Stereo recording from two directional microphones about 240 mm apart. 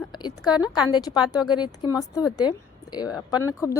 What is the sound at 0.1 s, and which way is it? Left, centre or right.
Speech, centre.